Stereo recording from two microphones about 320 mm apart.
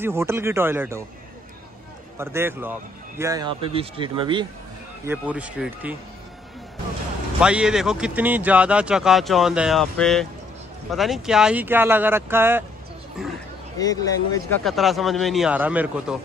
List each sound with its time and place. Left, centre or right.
0.0 s speech: centre
2.1 s a man's voice: centre
7.3 s a man's voice: centre
13.7 s a man's voice: centre